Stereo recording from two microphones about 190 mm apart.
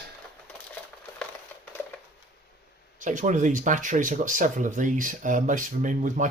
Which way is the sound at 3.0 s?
40° right (ahead or behind).